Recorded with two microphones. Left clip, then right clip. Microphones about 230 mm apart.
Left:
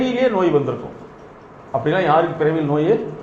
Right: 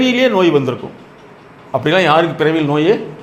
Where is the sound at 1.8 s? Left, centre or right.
Right.